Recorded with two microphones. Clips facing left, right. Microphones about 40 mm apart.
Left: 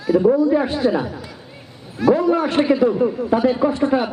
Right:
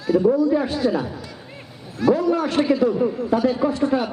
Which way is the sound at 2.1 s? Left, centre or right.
Left.